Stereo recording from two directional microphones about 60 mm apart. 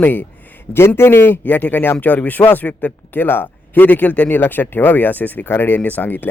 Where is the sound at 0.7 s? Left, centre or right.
Left.